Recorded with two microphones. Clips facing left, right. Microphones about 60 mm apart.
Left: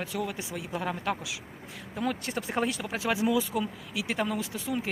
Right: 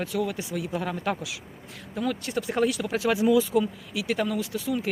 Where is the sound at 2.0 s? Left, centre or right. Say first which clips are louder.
Right 3 dB; left.